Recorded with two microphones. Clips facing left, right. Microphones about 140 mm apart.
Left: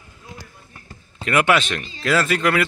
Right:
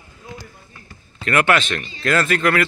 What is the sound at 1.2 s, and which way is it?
Speech, 10° left (ahead or behind).